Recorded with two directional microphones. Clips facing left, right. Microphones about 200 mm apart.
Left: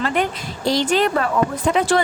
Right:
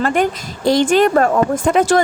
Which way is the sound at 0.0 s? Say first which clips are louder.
Right 5 dB; 45° right (ahead or behind).